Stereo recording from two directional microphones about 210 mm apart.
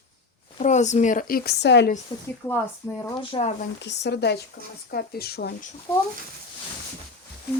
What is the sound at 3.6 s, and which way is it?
Speech, 55° left (ahead or behind).